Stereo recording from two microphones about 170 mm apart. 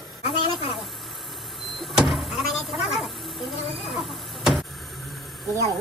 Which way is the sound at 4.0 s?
Centre (ahead or behind).